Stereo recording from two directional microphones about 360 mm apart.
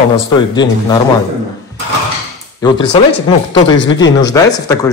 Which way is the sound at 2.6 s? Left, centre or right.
Centre.